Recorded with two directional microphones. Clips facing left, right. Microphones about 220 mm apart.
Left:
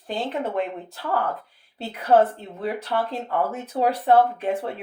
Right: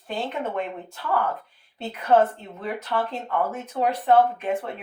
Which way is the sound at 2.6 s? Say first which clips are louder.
Left 2 dB; 35° left (ahead or behind).